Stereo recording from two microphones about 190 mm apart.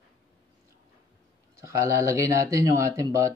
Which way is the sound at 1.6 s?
15° right (ahead or behind).